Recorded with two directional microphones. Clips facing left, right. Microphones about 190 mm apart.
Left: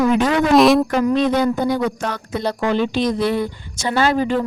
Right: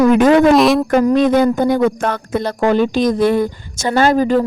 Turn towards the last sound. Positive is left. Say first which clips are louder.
# right 5 dB
turn(degrees=-40)  # may be behind; listen again after turning